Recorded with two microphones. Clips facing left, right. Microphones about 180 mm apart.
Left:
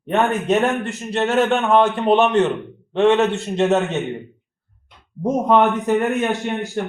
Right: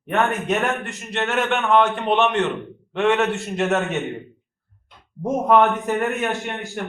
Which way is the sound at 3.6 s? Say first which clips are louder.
Left 4 dB; 20° left (ahead or behind).